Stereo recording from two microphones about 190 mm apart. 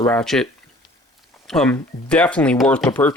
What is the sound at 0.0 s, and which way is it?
Speech, 5° left (ahead or behind).